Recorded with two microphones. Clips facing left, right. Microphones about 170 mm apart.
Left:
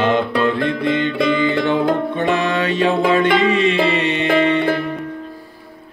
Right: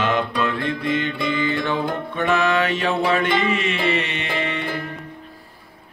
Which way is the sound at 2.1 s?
30° left (ahead or behind).